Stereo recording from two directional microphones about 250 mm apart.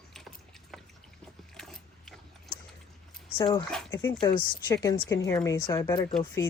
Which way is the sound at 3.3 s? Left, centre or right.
Centre.